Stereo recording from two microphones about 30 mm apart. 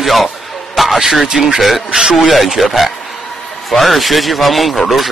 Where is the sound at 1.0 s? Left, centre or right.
Centre.